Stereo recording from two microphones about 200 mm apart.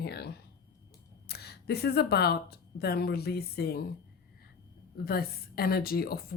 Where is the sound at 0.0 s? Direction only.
55° left (ahead or behind).